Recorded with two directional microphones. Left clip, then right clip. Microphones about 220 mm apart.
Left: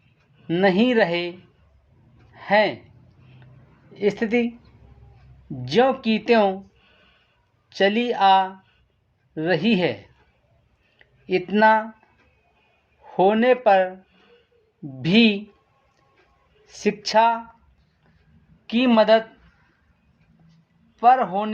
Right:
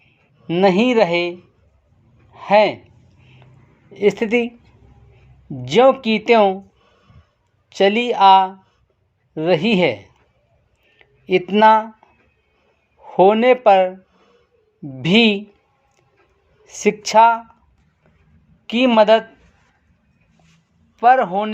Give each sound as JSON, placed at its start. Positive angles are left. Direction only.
{"t": 0.4, "sound": "speech", "side_deg": -25}
{"t": 2.3, "sound": "a sound", "side_deg": -30}
{"t": 3.9, "sound": "speech", "side_deg": -35}
{"t": 5.6, "sound": "speech", "side_deg": -30}
{"t": 7.7, "sound": "speech", "side_deg": -30}
{"t": 10.9, "sound": "a sound", "side_deg": -30}
{"t": 13.1, "sound": "speech", "side_deg": -30}
{"t": 15.0, "sound": "speech", "side_deg": -30}
{"t": 16.6, "sound": "speech", "side_deg": -30}
{"t": 18.6, "sound": "speech", "side_deg": -30}
{"t": 21.0, "sound": "speech", "side_deg": -30}